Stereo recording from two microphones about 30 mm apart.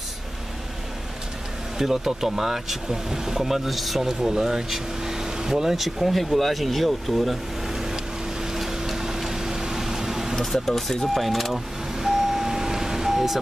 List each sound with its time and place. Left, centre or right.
1.8 s speech: centre
3.7 s speech: centre
4.2 s speech: centre
5.8 s speech: centre
8.5 s vehicle: centre
10.3 s speech: centre
10.7 s speech: centre
11.1 s speech: centre
12.0 s vehicle: centre